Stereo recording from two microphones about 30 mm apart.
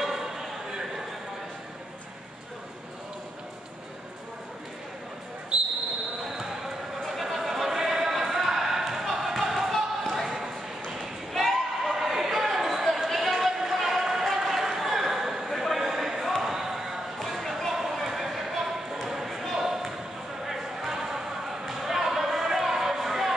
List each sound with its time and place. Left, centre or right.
0.0 s a sound: centre
6.2 s basketball bounce: centre
7.1 s a sound: centre
9.7 s basketball bounce: centre
10.2 s basketball bounce: centre
11.0 s basketball bounce: centre
11.8 s basketball bounce: centre
17.9 s basketball bounce: centre
18.6 s a sound: centre